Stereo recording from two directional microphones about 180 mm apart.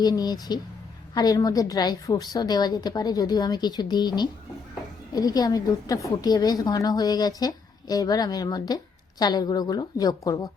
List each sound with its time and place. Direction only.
0.0 s a woman's voice: 20° left (ahead or behind)